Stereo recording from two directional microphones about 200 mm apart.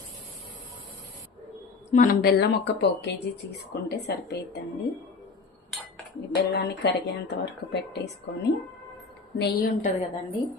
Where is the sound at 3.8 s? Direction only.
55° left (ahead or behind).